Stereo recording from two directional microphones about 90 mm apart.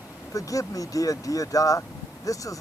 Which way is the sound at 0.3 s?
40° left (ahead or behind).